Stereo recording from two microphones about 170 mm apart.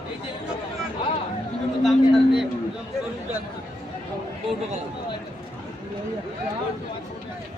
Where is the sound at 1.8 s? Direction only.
Centre (ahead or behind).